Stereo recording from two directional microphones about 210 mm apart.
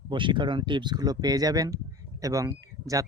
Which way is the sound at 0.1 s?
25° right (ahead or behind).